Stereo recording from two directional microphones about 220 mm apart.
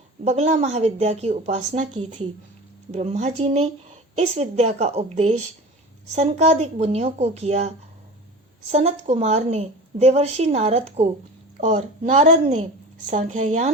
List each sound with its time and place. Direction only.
0.3 s a woman's voice: 30° right (ahead or behind)
8.7 s a woman's voice: 30° right (ahead or behind)